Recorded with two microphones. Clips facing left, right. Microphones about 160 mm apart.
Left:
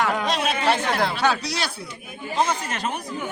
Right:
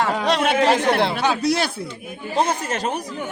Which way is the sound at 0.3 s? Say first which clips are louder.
Right 5 dB; 65° right (ahead or behind).